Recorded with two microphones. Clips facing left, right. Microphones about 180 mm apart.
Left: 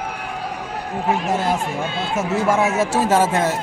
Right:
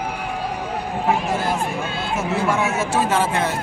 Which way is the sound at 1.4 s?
20° left (ahead or behind).